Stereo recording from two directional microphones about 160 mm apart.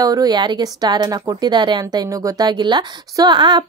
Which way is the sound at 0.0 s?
25° right (ahead or behind).